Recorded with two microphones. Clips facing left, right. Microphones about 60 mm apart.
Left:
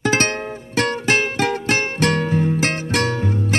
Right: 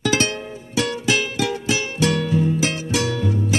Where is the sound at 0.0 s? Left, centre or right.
Left.